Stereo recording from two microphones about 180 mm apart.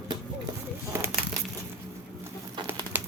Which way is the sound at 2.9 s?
10° right (ahead or behind).